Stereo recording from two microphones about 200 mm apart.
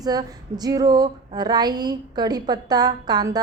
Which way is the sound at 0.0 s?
20° right (ahead or behind).